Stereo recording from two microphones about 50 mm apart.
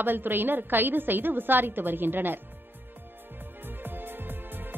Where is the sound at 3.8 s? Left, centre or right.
Right.